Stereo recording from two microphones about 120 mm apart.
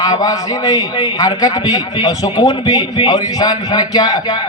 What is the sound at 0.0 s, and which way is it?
A man's voice, 35° left (ahead or behind).